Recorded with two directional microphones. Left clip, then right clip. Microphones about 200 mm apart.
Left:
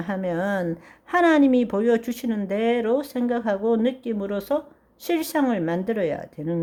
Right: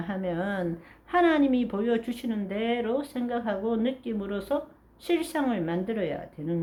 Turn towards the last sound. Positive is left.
turn(degrees=50)  # may be behind; listen again after turning